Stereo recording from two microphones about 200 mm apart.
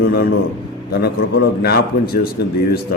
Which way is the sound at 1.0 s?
55° left (ahead or behind).